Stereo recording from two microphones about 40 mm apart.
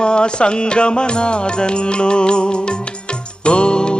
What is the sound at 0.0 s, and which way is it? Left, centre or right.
Music, left.